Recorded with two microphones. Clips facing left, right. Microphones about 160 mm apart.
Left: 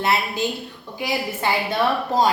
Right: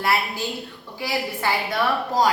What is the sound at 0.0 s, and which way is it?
A woman's voice, 20° left (ahead or behind).